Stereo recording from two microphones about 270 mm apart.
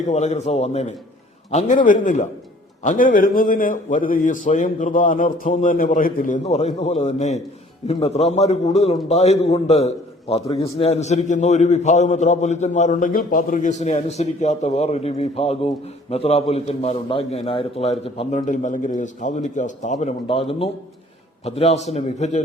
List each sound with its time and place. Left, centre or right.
0.0 s a man's voice: left